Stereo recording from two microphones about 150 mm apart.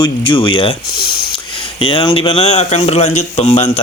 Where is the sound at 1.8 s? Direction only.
35° left (ahead or behind).